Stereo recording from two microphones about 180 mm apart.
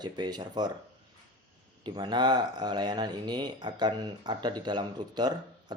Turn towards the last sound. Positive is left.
turn(degrees=-25)  # may be behind; listen again after turning